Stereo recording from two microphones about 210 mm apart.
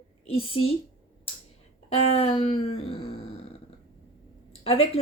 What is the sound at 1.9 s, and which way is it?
Speech, 30° left (ahead or behind).